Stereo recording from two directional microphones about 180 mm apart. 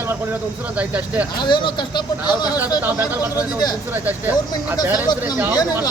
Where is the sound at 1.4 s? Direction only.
25° left (ahead or behind).